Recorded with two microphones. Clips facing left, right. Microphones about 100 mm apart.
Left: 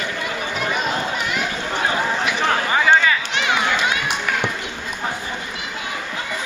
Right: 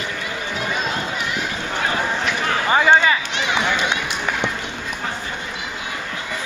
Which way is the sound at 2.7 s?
25° right (ahead or behind).